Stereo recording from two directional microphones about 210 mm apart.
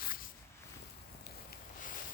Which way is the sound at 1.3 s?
50° left (ahead or behind).